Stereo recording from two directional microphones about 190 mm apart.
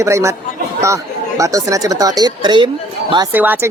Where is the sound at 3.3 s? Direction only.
10° right (ahead or behind).